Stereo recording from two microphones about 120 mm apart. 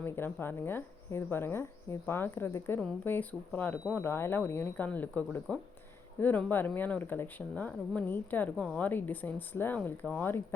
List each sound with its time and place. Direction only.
0.0 s speech: 20° left (ahead or behind)